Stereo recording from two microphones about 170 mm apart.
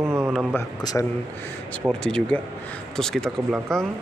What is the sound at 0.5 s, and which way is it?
Speech, 20° left (ahead or behind).